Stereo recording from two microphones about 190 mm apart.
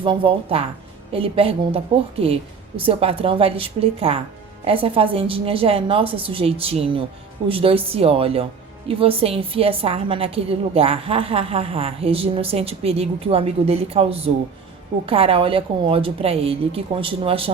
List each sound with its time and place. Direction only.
0.0 s a woman's voice: 25° right (ahead or behind)